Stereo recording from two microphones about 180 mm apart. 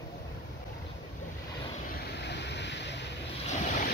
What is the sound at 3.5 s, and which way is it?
Waves, 40° left (ahead or behind).